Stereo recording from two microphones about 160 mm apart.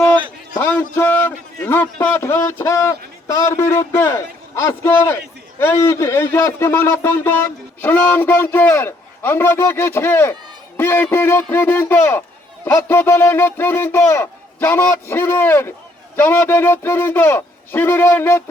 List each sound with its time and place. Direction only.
0.6 s a man's voice: 15° left (ahead or behind)